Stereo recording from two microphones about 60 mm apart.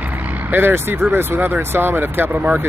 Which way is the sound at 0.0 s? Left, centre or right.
Right.